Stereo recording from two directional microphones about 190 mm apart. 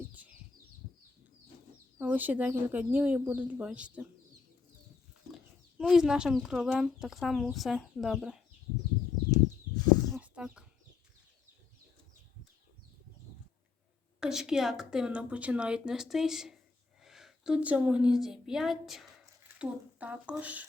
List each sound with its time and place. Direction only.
2.0 s speech: 10° right (ahead or behind)
5.3 s a woman's voice: 5° right (ahead or behind)
10.2 s livestock: 5° right (ahead or behind)
14.2 s a woman's voice: 5° right (ahead or behind)